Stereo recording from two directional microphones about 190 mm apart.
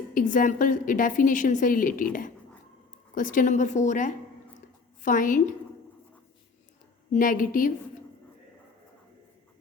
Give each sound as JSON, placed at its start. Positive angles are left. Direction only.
{"t": 0.1, "sound": "a woman's voice", "side_deg": 45}
{"t": 3.2, "sound": "a woman's voice", "side_deg": 45}
{"t": 7.1, "sound": "a woman's voice", "side_deg": 45}